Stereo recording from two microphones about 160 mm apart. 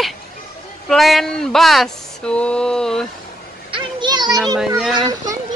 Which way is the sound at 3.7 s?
30° right (ahead or behind).